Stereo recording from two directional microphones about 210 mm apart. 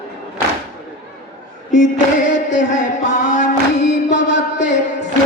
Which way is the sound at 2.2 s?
35° left (ahead or behind).